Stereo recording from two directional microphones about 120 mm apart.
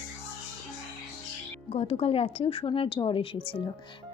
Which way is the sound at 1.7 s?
55° left (ahead or behind).